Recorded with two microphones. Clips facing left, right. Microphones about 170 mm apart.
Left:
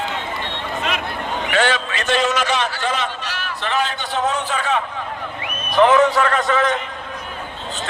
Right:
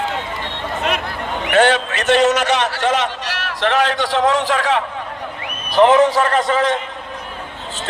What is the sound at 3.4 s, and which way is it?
A man's voice, 90° right.